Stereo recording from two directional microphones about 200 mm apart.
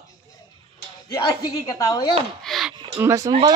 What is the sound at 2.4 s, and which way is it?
Speech, centre (ahead or behind).